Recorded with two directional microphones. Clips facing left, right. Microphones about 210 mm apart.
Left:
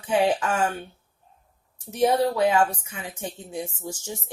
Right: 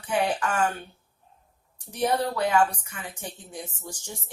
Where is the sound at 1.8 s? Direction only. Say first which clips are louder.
Left 5 dB; 20° left (ahead or behind).